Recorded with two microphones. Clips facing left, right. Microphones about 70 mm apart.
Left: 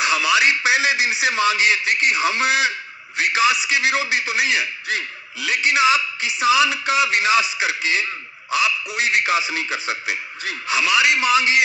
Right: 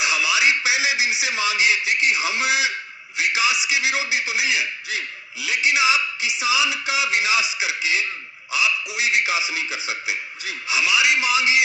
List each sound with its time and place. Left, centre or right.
0.0 s a man's voice: left